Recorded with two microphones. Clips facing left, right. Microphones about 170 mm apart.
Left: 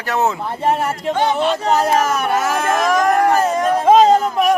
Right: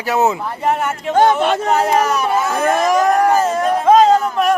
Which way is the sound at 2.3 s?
90° left.